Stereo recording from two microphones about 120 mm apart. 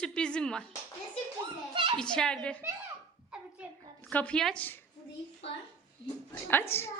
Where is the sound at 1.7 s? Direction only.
45° right (ahead or behind).